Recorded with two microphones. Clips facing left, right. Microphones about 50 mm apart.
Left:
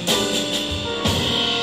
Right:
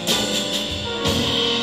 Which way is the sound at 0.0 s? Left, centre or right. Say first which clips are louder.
Left 1 dB; centre.